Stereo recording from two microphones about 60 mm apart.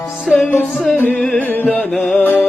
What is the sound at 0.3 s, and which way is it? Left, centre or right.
Music, centre.